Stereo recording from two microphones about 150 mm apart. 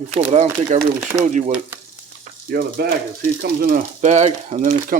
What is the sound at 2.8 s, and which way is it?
Speech, 90° right.